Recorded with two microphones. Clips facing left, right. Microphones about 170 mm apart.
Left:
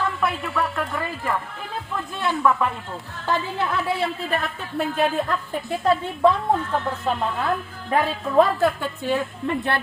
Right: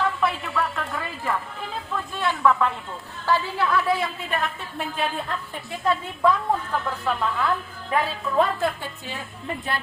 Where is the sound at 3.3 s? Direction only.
25° left (ahead or behind); by 5.3 s 45° left (ahead or behind).